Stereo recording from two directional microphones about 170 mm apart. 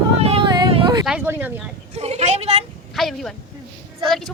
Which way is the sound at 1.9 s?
40° right (ahead or behind).